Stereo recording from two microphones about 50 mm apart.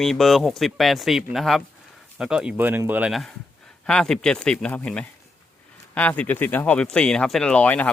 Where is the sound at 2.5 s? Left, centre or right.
Right.